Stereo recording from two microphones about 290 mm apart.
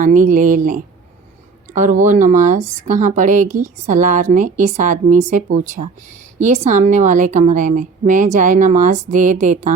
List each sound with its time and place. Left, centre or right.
0.0 s speech: right
6.4 s speech: right